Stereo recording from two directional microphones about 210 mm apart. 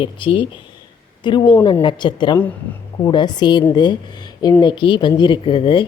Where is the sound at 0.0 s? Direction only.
25° left (ahead or behind).